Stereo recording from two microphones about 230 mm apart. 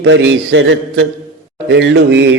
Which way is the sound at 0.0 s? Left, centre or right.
Right.